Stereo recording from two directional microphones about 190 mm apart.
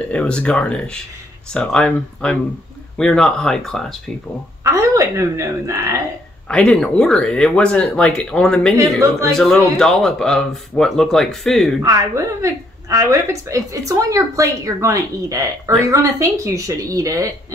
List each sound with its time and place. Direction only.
0.1 s speech: 5° left (ahead or behind)
4.6 s speech: 15° right (ahead or behind)
6.5 s speech: 5° left (ahead or behind)
11.8 s a woman's voice: 15° right (ahead or behind)